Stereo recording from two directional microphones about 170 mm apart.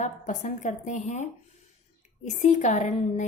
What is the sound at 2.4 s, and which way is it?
Speech, 45° left (ahead or behind).